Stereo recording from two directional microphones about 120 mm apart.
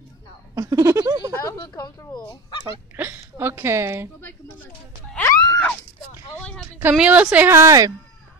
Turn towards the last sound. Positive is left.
turn(degrees=-30)  # may be behind; listen again after turning